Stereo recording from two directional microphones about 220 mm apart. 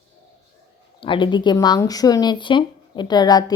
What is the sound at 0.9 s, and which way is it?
Speech, 25° left (ahead or behind).